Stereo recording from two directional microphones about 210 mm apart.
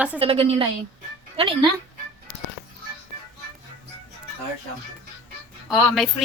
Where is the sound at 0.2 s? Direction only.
25° right (ahead or behind).